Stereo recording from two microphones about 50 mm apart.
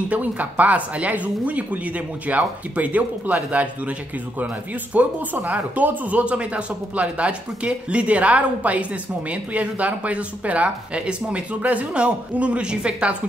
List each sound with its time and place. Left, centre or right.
0.1 s speech: right
4.9 s speech: right